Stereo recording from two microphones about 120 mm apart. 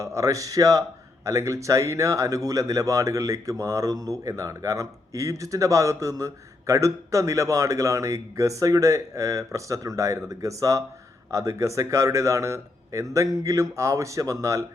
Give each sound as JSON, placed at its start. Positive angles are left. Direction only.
{"t": 0.0, "sound": "speech", "side_deg": -25}